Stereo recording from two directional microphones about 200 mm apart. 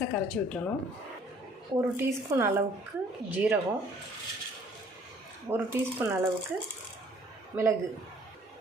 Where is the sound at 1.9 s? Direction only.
10° right (ahead or behind).